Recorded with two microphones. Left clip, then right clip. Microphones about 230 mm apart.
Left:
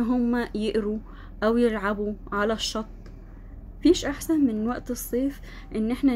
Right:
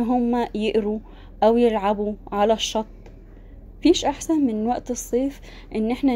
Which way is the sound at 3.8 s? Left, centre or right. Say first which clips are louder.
Right 3 dB; centre.